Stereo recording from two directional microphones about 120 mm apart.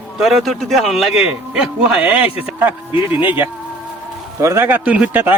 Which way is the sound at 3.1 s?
15° right (ahead or behind).